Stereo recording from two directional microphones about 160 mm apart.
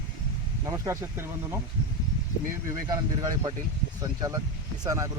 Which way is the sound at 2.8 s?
25° right (ahead or behind).